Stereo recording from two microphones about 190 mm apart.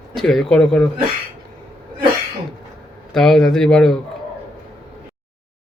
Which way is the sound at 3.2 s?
Centre (ahead or behind).